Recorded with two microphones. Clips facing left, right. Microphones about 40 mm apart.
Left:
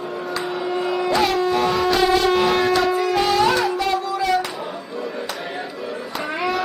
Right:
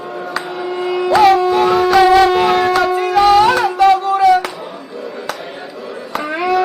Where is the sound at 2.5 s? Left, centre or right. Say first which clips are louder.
Right 4 dB; right.